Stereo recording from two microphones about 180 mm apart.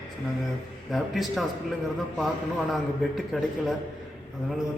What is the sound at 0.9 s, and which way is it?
A man's voice, centre (ahead or behind).